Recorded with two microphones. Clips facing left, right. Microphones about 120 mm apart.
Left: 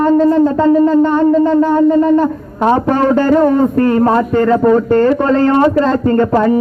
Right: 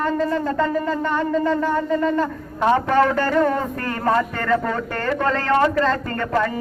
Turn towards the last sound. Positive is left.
turn(degrees=25)  # may be behind; listen again after turning